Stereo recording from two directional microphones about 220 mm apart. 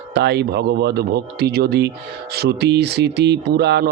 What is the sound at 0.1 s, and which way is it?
A man's voice, 50° right (ahead or behind).